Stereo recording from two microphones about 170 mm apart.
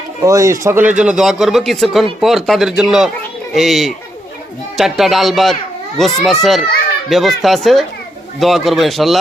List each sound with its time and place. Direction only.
0.3 s a man's voice: 20° right (ahead or behind); by 9.1 s centre (ahead or behind)